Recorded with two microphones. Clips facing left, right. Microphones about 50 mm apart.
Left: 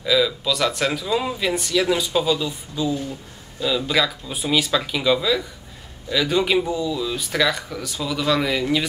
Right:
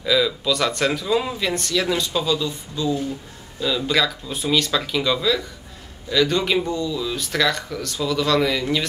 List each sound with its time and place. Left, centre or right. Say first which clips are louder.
0.0 s speech: even; centre